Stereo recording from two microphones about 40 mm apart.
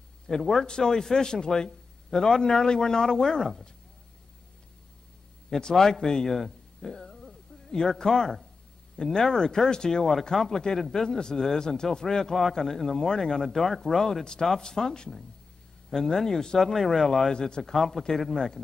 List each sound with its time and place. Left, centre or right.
0.3 s speech: centre
5.5 s a man's voice: centre
5.8 s a sound: centre
8.0 s speech: centre
17.7 s speech: centre
18.3 s speech: centre